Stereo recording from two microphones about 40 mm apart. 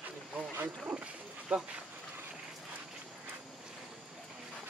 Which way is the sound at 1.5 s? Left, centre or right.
Right.